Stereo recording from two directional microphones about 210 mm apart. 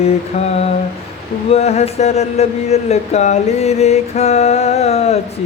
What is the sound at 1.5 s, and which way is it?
Speech, 30° left (ahead or behind).